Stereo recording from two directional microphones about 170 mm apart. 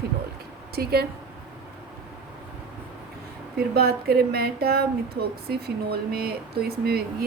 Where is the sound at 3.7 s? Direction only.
65° right (ahead or behind).